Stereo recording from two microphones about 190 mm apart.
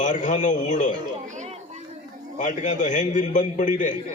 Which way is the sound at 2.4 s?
40° left (ahead or behind).